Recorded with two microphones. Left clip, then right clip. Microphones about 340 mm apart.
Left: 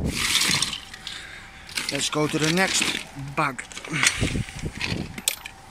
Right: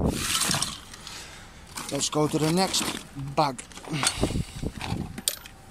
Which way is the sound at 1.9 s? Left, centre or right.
Centre.